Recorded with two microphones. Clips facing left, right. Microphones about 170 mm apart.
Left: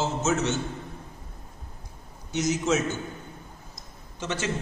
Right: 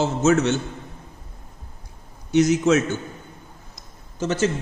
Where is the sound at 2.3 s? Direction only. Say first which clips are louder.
Right 8 dB; 65° right (ahead or behind).